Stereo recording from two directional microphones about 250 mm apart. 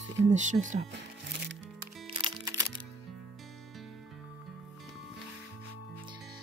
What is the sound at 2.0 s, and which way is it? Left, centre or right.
Music, centre.